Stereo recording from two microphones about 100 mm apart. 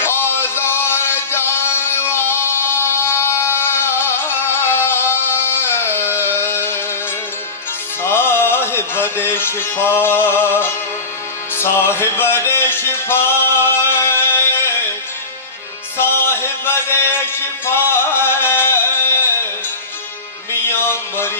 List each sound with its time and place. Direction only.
0.0 s music: 25° left (ahead or behind)
8.0 s music: 25° left (ahead or behind)
16.0 s music: 25° left (ahead or behind)
20.5 s music: 25° left (ahead or behind)